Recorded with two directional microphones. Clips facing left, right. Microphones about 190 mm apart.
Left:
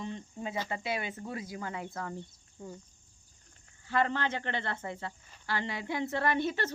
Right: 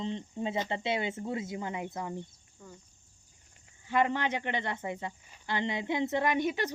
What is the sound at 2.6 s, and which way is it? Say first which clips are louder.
Speech: left 6 dB; 25° left (ahead or behind).